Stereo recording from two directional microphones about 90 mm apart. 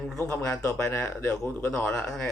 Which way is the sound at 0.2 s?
30° left (ahead or behind).